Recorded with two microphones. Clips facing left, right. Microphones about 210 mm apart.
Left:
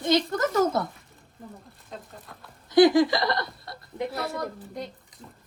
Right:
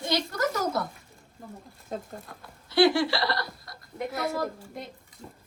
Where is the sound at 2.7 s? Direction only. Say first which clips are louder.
Left 4 dB; 15° left (ahead or behind).